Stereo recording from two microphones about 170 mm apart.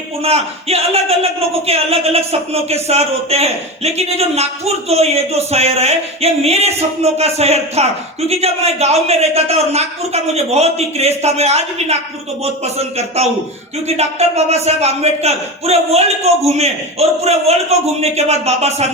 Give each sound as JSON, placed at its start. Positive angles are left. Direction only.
{"t": 0.2, "sound": "speech", "side_deg": -35}